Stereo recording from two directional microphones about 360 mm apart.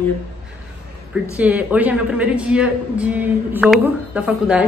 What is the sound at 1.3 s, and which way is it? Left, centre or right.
A man's voice, centre.